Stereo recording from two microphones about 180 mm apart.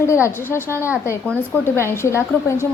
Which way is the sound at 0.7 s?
10° right (ahead or behind).